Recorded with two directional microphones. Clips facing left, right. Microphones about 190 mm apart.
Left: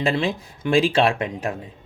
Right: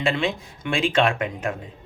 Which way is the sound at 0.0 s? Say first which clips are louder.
Left 1 dB; 40° left (ahead or behind).